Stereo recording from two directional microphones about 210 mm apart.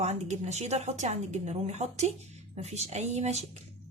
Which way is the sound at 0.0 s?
30° right (ahead or behind).